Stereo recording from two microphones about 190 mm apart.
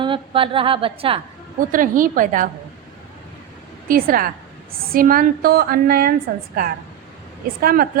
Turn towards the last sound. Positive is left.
turn(degrees=-50)  # may be behind; listen again after turning